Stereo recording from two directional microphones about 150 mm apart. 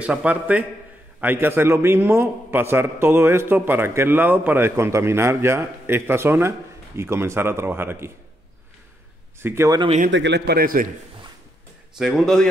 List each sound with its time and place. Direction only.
0.0 s a man's voice: 10° right (ahead or behind)
9.4 s a man's voice: 20° right (ahead or behind)
9.9 s a man's voice: 80° right
12.0 s a man's voice: centre (ahead or behind)